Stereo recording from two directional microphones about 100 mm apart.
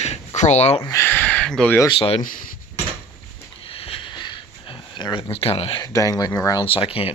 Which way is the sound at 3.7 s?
70° left (ahead or behind).